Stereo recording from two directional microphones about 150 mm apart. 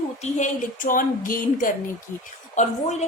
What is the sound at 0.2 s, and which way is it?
A woman's voice, 55° left (ahead or behind).